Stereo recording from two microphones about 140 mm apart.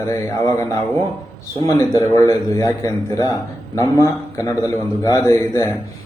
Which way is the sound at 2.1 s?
20° left (ahead or behind).